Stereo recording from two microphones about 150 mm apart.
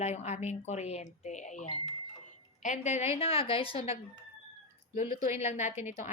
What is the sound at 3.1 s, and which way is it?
Speech, 40° left (ahead or behind).